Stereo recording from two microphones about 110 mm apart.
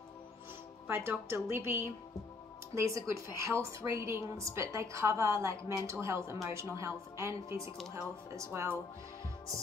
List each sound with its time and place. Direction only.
0.8 s a woman's voice: 20° right (ahead or behind)